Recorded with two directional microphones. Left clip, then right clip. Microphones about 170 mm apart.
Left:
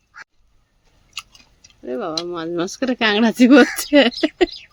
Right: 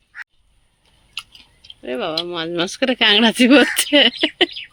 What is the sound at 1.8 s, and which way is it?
Speech, centre (ahead or behind).